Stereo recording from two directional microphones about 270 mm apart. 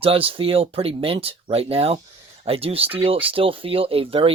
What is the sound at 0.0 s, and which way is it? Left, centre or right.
Speech, right.